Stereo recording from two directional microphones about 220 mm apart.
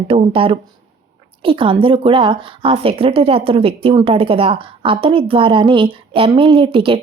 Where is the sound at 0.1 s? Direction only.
25° right (ahead or behind).